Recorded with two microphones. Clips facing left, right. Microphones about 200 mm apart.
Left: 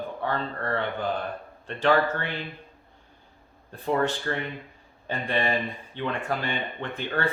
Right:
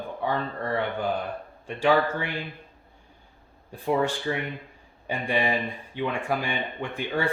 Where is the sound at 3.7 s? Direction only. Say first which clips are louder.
Right 1 dB; 10° right (ahead or behind).